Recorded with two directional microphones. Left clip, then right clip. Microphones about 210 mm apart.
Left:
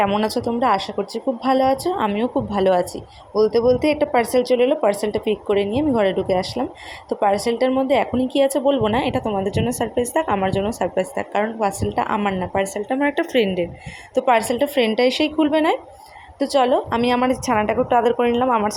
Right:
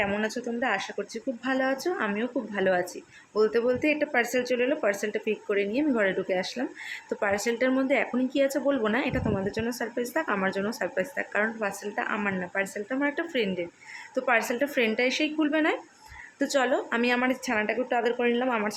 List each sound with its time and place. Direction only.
0.0 s a woman's voice: 25° left (ahead or behind)